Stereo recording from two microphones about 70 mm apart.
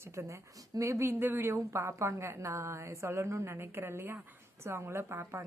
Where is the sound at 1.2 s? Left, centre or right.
Right.